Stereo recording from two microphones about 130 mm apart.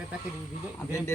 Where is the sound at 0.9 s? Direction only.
20° left (ahead or behind).